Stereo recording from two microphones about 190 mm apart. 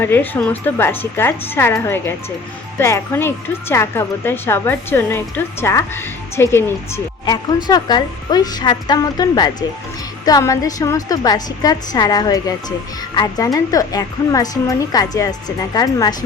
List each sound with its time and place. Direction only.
0.0 s a woman's voice: 10° left (ahead or behind)